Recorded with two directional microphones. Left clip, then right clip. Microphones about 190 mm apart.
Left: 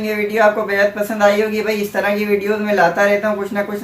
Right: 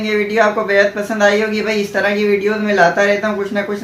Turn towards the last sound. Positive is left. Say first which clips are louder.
# even
turn(degrees=0)  # may be behind; listen again after turning